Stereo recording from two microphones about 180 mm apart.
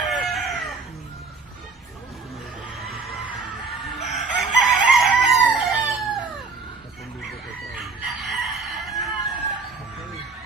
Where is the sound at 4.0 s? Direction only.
Centre (ahead or behind).